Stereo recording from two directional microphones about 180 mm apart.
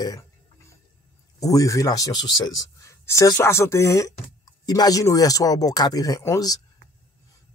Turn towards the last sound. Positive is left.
turn(degrees=20)  # may be behind; listen again after turning